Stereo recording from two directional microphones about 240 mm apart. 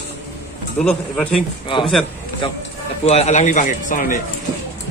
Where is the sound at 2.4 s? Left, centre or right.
Left.